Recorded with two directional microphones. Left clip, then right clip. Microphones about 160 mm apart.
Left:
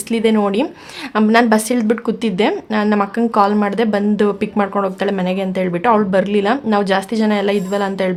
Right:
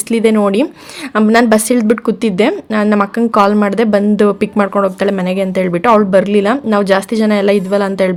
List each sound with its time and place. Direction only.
0.1 s a woman's voice: 25° right (ahead or behind)